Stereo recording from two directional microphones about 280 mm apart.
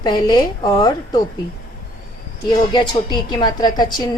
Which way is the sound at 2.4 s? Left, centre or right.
Centre.